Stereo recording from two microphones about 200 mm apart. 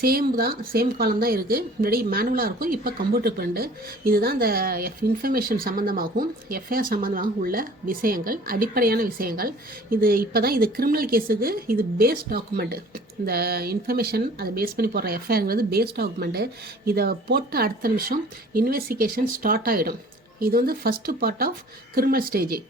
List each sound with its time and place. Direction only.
0.0 s a woman's voice: 50° right (ahead or behind)